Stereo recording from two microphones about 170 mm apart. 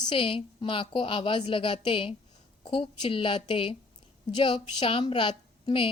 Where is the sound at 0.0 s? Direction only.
30° left (ahead or behind).